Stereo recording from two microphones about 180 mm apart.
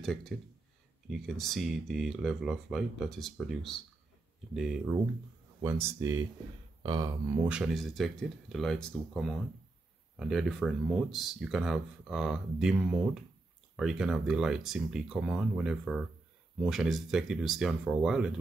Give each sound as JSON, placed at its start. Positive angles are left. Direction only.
{"t": 0.0, "sound": "speech", "side_deg": 5}
{"t": 5.6, "sound": "speech", "side_deg": -15}
{"t": 6.8, "sound": "a sound", "side_deg": -20}
{"t": 7.4, "sound": "speech", "side_deg": -5}